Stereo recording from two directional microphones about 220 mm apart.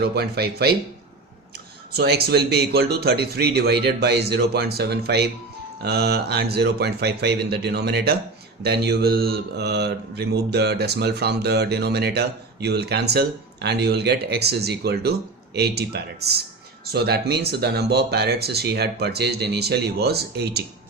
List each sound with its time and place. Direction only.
0.0 s mantra: 45° right (ahead or behind)
1.9 s mantra: 45° right (ahead or behind)